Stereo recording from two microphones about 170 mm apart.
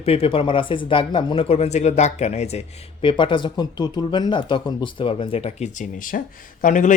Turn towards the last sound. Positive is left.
turn(degrees=50)  # may be behind; listen again after turning